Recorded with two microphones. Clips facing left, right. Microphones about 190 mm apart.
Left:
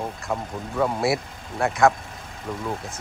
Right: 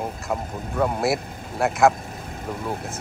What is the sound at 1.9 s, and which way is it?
Vehicle, 45° right (ahead or behind).